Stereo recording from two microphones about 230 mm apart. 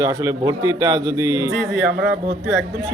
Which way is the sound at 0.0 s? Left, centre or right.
Centre.